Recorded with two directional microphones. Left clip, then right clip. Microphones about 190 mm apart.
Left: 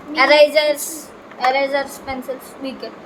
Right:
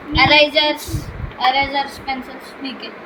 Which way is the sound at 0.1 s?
50° left (ahead or behind).